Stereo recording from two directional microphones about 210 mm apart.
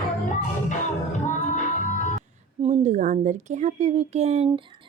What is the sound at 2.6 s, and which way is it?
Speech, 35° right (ahead or behind).